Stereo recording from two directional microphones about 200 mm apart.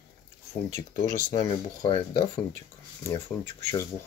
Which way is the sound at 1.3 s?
20° left (ahead or behind).